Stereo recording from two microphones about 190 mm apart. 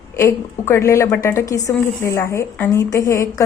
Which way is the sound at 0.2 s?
15° left (ahead or behind).